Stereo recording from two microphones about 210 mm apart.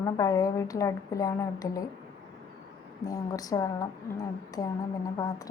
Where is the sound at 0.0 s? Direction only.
15° left (ahead or behind).